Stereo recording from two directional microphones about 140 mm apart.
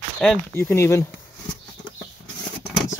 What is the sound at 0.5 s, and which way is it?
Speech, 20° left (ahead or behind).